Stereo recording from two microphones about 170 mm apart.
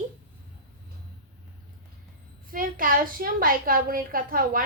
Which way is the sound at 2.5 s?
55° right (ahead or behind).